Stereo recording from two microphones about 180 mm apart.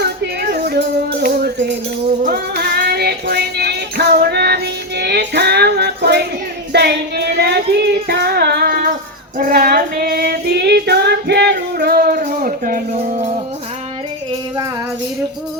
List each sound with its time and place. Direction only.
0.5 s music: 65° right (ahead or behind)
2.0 s music: 45° right (ahead or behind)
2.6 s music: 60° right (ahead or behind)
6.7 s child singing: 65° right (ahead or behind); by 13.3 s 40° right (ahead or behind)